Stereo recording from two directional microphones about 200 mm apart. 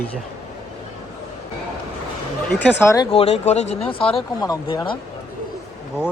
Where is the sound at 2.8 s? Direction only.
15° left (ahead or behind).